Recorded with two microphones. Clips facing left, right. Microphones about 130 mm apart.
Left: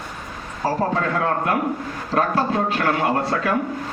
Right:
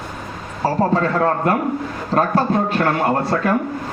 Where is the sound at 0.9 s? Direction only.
40° right (ahead or behind).